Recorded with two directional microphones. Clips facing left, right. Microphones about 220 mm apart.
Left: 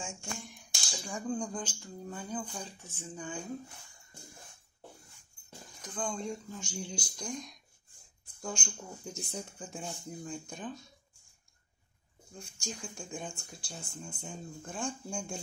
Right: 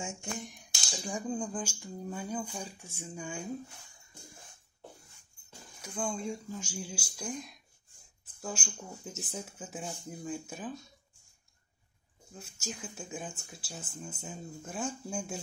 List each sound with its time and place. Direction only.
0.0 s a sound: 20° right (ahead or behind)
1.0 s speech: 10° right (ahead or behind)
5.8 s speech: 10° right (ahead or behind)
12.4 s speech: 5° right (ahead or behind)